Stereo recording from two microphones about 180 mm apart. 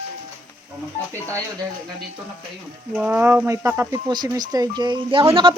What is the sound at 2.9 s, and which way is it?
Speech, 10° right (ahead or behind).